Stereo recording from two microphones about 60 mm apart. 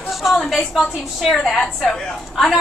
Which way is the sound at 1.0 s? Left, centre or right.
Centre.